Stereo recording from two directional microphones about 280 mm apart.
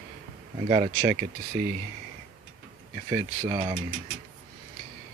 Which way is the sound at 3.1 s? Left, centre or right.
Centre.